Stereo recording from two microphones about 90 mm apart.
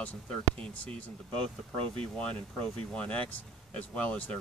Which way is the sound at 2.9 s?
15° left (ahead or behind).